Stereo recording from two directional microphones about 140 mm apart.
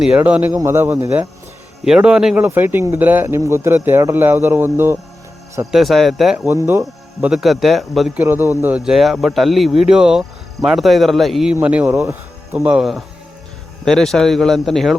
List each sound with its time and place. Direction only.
0.0 s speech: 10° right (ahead or behind)
5.7 s speech: centre (ahead or behind)
6.6 s speech: 20° right (ahead or behind)
7.2 s speech: 5° right (ahead or behind)
8.2 s speech: 15° right (ahead or behind)
8.8 s speech: centre (ahead or behind)